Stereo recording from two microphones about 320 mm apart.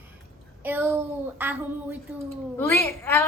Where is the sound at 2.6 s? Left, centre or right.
Centre.